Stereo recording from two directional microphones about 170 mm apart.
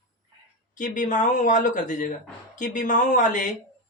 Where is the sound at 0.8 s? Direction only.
50° left (ahead or behind).